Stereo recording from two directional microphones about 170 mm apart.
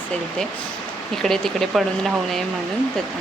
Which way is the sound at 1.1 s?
Centre (ahead or behind).